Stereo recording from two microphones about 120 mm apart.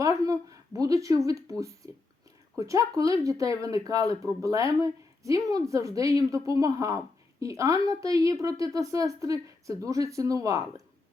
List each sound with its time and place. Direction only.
0.0 s speech: 30° right (ahead or behind)